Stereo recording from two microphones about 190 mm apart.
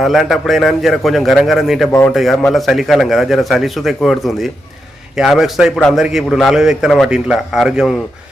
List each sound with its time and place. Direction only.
0.0 s a man's voice: centre (ahead or behind)